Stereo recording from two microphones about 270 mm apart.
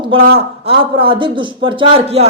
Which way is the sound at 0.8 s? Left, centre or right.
Centre.